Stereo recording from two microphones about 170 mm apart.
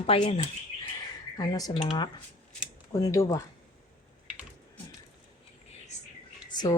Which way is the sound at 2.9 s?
20° left (ahead or behind).